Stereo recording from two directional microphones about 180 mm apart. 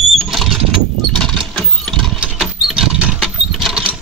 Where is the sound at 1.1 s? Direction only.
5° left (ahead or behind).